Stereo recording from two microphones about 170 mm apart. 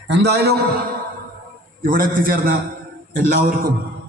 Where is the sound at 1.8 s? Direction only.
55° right (ahead or behind).